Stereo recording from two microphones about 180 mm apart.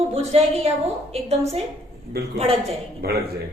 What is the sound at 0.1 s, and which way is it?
A woman's voice, 35° right (ahead or behind).